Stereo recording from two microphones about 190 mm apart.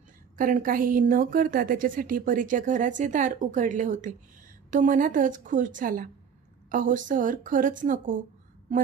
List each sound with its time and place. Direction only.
0.4 s a woman's voice: 45° right (ahead or behind)